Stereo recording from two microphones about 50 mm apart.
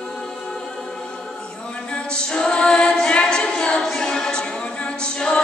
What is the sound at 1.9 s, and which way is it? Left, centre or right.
A capella, centre.